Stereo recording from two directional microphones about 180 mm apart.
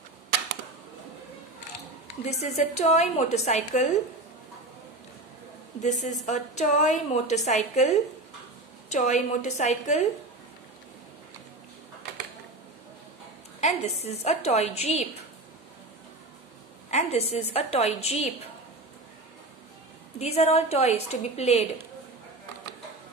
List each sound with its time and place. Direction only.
2.2 s a woman's voice: 40° left (ahead or behind)
5.8 s a woman's voice: 40° left (ahead or behind)
13.6 s a woman's voice: 35° left (ahead or behind)
16.9 s a woman's voice: 35° left (ahead or behind)
20.2 s a woman's voice: 35° left (ahead or behind)